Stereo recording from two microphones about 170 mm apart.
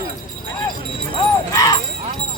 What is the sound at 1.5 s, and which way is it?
Jingle bell, 20° left (ahead or behind).